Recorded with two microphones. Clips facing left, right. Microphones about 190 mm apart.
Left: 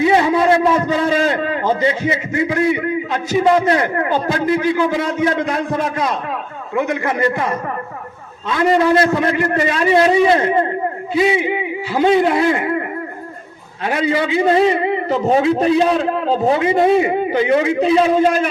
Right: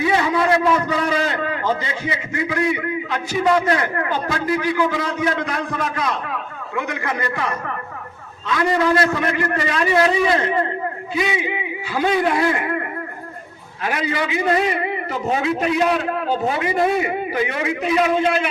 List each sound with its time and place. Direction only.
0.0 s a man's voice: 25° left (ahead or behind)
13.8 s a man's voice: 25° left (ahead or behind)